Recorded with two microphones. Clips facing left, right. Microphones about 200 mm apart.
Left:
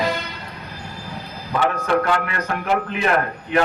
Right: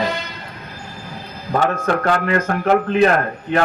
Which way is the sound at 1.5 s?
45° right (ahead or behind).